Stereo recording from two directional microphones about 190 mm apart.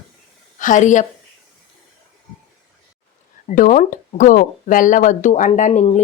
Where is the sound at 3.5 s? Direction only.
45° left (ahead or behind).